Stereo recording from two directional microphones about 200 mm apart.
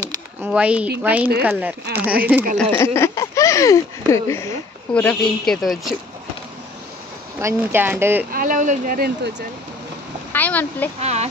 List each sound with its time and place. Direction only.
0.0 s a sound: 15° right (ahead or behind)
0.5 s speech: 5° right (ahead or behind)
2.8 s speech: 15° left (ahead or behind)
7.3 s speech: 10° right (ahead or behind)
8.3 s speech: 45° right (ahead or behind)
10.3 s speech: 10° left (ahead or behind)
11.0 s speech: 35° right (ahead or behind)